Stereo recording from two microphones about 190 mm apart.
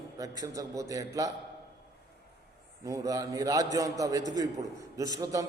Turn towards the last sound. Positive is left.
turn(degrees=-20)  # may be behind; listen again after turning